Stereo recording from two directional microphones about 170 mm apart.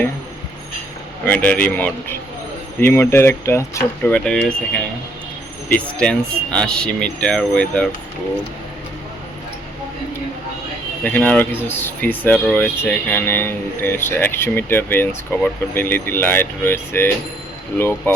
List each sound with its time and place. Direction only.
1.2 s speech: 10° left (ahead or behind)
4.1 s speech: 5° left (ahead or behind)
6.0 s speech: 5° left (ahead or behind)
11.0 s speech: 10° left (ahead or behind)